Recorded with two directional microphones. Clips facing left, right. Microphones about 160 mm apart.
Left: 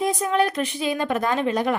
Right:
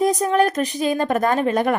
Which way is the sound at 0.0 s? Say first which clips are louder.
Right 4 dB; 40° right (ahead or behind).